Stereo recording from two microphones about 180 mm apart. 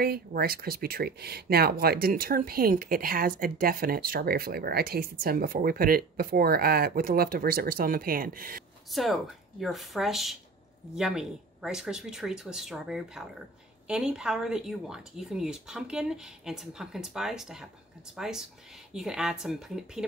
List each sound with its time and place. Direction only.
0.0 s speech: 60° right (ahead or behind)
8.9 s speech: centre (ahead or behind)